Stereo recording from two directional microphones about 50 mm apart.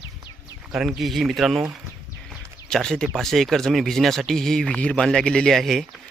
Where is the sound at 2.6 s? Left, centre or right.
Centre.